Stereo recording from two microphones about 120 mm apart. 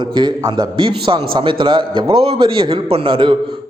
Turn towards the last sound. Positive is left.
turn(degrees=-45)  # may be behind; listen again after turning